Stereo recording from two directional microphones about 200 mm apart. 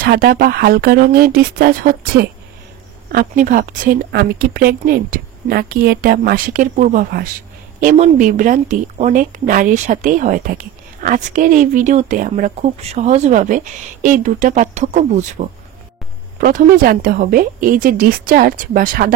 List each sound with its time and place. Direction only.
0.0 s a woman's voice: 45° right (ahead or behind)